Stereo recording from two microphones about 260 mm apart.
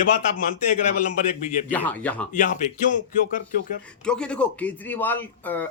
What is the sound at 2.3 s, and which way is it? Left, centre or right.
Speech, left.